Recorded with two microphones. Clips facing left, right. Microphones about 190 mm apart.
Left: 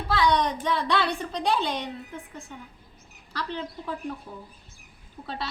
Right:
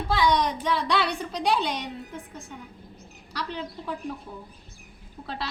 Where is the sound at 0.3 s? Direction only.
Centre (ahead or behind).